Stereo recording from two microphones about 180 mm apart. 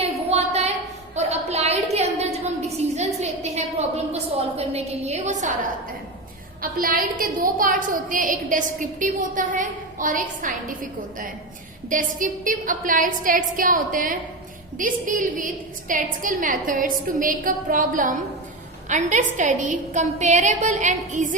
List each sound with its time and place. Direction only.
0.3 s a sound: 35° right (ahead or behind)
6.6 s a woman's voice: 50° right (ahead or behind)
11.9 s a woman's voice: 45° right (ahead or behind)